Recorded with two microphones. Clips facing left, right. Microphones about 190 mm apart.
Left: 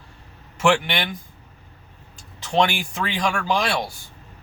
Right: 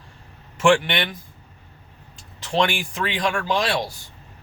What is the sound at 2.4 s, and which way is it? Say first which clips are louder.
Speech: left 1 dB; centre (ahead or behind).